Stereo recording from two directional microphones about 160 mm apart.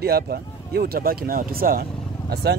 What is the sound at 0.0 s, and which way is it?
Speech, 80° right.